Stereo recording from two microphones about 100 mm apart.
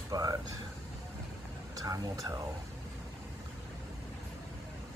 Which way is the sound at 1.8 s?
35° right (ahead or behind).